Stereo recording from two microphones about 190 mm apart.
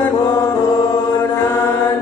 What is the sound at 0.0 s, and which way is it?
Mantra, 10° left (ahead or behind).